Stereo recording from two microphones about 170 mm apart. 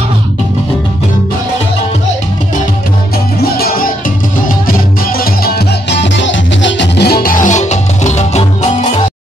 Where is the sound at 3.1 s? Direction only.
65° left (ahead or behind); by 9.0 s 45° left (ahead or behind).